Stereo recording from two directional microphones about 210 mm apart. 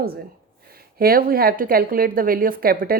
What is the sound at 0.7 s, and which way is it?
A woman's voice, 45° right (ahead or behind).